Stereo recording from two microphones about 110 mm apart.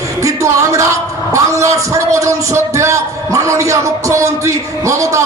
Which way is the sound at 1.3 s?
30° right (ahead or behind).